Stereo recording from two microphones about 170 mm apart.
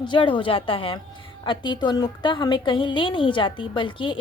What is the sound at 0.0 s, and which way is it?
A woman's voice, 30° left (ahead or behind).